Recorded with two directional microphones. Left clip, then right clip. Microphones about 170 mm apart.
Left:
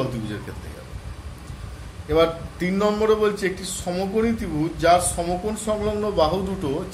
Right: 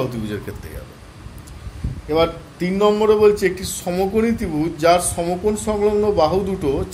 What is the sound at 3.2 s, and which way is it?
Speech, 35° right (ahead or behind).